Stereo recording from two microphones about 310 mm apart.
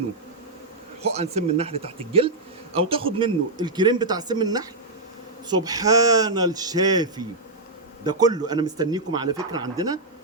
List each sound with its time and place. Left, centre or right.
1.0 s speech: centre